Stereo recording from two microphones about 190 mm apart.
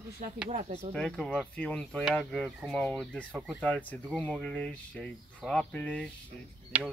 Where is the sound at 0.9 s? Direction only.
5° left (ahead or behind).